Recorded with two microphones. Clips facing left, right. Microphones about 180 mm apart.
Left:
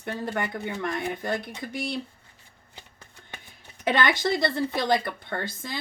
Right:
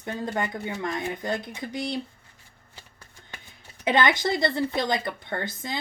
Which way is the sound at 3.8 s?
20° right (ahead or behind).